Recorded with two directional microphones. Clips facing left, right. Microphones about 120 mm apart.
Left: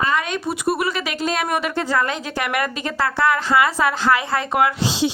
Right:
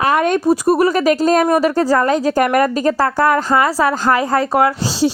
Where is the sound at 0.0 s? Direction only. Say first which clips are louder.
Right 8 dB; 55° right (ahead or behind).